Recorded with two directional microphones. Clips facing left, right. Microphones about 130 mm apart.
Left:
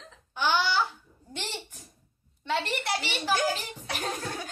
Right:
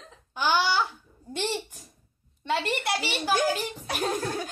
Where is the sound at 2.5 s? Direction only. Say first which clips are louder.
Right 2 dB; 10° right (ahead or behind).